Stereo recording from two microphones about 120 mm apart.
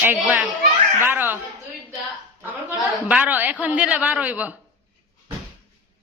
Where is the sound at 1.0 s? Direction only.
15° right (ahead or behind).